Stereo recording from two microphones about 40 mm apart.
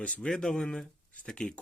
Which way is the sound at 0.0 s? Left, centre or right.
Left.